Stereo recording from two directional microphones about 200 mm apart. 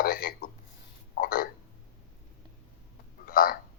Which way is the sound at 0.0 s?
45° left (ahead or behind).